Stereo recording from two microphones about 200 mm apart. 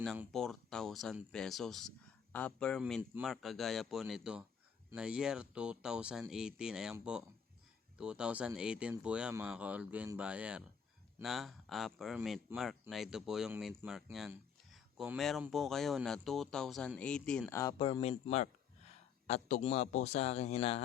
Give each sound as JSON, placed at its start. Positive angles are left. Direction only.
{"t": 0.3, "sound": "speech", "side_deg": 0}
{"t": 17.6, "sound": "speech", "side_deg": 20}
{"t": 19.3, "sound": "a man's voice", "side_deg": 35}